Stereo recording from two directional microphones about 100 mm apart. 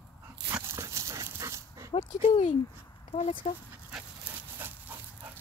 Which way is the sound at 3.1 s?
70° left (ahead or behind).